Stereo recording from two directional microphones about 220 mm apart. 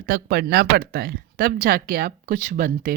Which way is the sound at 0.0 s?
45° right (ahead or behind).